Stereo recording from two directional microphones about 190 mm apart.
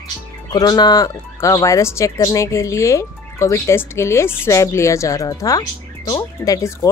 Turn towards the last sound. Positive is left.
turn(degrees=20)  # may be behind; listen again after turning